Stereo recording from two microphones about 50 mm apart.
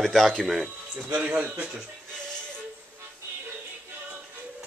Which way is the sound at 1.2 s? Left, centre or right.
Right.